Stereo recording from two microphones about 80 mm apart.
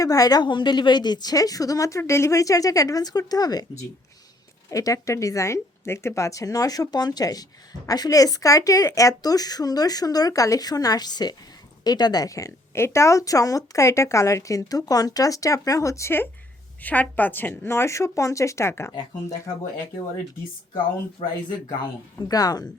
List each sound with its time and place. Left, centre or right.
0.0 s speech: left
16.8 s a woman's voice: centre
18.9 s speech: left
21.2 s speech: left
22.3 s speech: left